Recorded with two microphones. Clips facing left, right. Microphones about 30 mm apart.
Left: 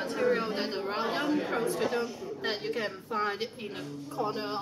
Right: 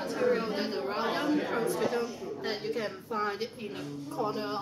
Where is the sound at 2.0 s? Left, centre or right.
Left.